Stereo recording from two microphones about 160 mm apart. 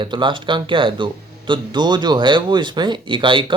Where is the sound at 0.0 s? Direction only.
30° right (ahead or behind).